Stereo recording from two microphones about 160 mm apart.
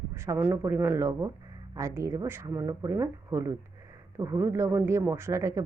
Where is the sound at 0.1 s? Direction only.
15° right (ahead or behind).